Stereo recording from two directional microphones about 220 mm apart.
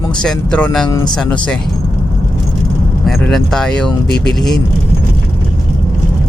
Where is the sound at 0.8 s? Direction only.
20° left (ahead or behind).